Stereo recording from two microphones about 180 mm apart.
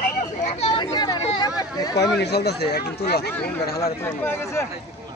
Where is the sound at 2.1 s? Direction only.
65° left (ahead or behind).